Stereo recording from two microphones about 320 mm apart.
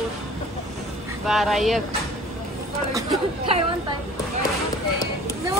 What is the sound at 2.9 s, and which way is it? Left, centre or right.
Speech, centre.